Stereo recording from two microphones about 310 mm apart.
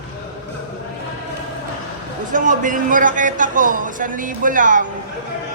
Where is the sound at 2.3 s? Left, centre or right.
Right.